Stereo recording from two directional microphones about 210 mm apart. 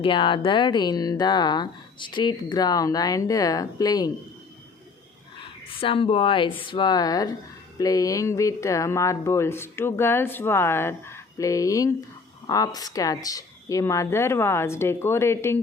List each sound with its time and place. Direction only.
0.0 s speech: 25° left (ahead or behind)
5.4 s speech: 25° left (ahead or behind)